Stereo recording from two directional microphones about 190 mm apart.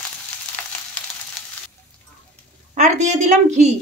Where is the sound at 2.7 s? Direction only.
40° right (ahead or behind).